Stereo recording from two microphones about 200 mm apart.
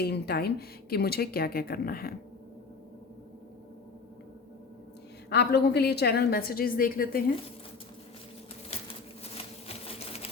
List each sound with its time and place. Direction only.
0.0 s speech: 50° left (ahead or behind)
5.3 s speech: 55° left (ahead or behind)
9.6 s sewing machine: 30° left (ahead or behind)